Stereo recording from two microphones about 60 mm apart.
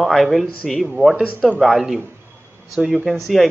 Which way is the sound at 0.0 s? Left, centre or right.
Centre.